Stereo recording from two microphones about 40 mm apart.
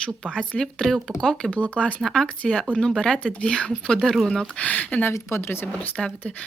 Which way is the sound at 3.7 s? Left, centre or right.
Centre.